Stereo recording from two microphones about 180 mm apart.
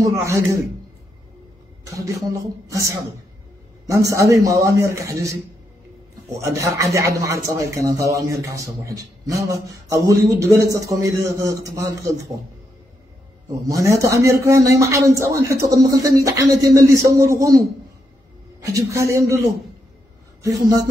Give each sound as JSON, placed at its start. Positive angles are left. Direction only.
{"t": 0.1, "sound": "speech", "side_deg": -15}
{"t": 2.0, "sound": "a woman's voice", "side_deg": -20}
{"t": 6.4, "sound": "speech", "side_deg": -15}
{"t": 13.5, "sound": "speech", "side_deg": -20}
{"t": 18.7, "sound": "speech", "side_deg": -15}
{"t": 20.4, "sound": "a woman's voice", "side_deg": -20}